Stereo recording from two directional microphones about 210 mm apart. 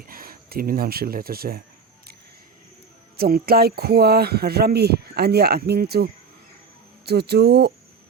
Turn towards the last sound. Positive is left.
turn(degrees=-50)  # may be behind; listen again after turning